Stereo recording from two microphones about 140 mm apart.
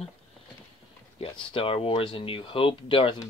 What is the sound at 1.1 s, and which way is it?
Speech, 40° left (ahead or behind).